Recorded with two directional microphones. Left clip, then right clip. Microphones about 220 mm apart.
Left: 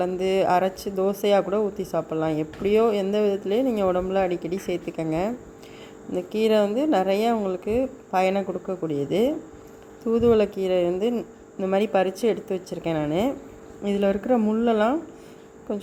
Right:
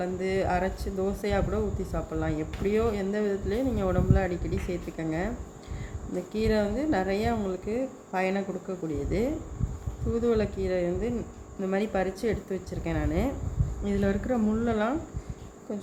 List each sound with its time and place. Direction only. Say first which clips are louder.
0.0 s speech: left 6 dB; 30° left (ahead or behind)
6.3 s speech: left 7 dB; 30° left (ahead or behind)